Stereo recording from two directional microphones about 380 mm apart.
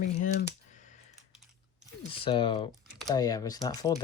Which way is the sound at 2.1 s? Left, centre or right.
Centre.